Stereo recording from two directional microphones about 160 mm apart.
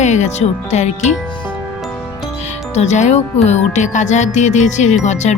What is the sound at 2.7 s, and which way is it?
Speech, 45° left (ahead or behind).